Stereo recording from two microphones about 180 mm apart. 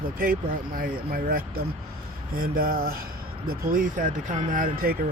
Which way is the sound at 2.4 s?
55° right (ahead or behind).